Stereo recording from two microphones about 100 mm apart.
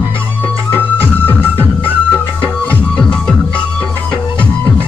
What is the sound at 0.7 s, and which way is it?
Music, 20° left (ahead or behind).